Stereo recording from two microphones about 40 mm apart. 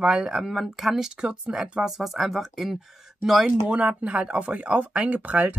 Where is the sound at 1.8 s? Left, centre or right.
Centre.